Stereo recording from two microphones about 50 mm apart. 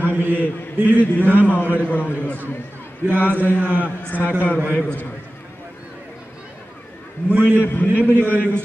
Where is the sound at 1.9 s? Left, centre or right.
Left.